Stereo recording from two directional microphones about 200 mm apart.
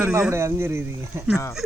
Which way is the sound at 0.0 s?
10° right (ahead or behind).